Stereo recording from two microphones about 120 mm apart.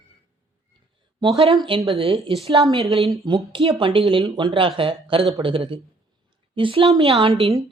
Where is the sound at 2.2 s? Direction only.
55° right (ahead or behind).